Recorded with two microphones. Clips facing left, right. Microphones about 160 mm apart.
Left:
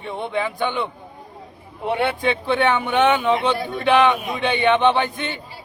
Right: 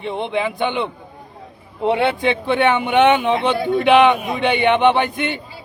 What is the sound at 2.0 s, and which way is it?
A man's voice, 20° right (ahead or behind).